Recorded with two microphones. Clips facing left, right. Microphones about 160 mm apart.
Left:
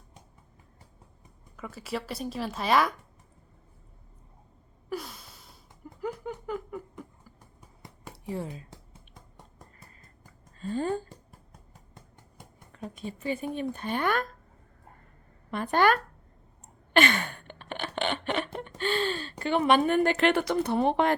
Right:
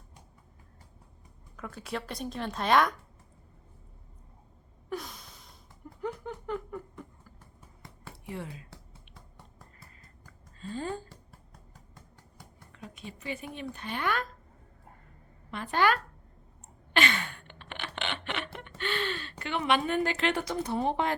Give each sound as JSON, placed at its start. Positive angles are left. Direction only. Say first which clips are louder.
{"t": 1.5, "sound": "a woman's voice", "louder": "left 2 dB", "side_deg": 0}
{"t": 4.9, "sound": "a sound", "louder": "left 2 dB", "side_deg": 5}
{"t": 8.3, "sound": "speech", "louder": "left 5 dB", "side_deg": 35}
{"t": 10.6, "sound": "a sound", "louder": "left 6 dB", "side_deg": 45}
{"t": 12.7, "sound": "a sound", "louder": "left 7 dB", "side_deg": 40}
{"t": 13.2, "sound": "speech", "louder": "left 7 dB", "side_deg": 40}
{"t": 15.4, "sound": "speech", "louder": "left 3 dB", "side_deg": 50}
{"t": 16.9, "sound": "gasp", "louder": "left 5 dB", "side_deg": 50}
{"t": 18.8, "sound": "speech", "louder": "left 4 dB", "side_deg": 35}